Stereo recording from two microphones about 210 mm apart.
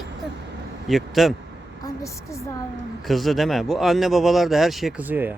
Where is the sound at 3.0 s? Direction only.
Centre (ahead or behind).